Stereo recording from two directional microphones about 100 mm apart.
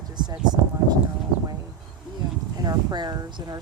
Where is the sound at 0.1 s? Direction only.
45° right (ahead or behind).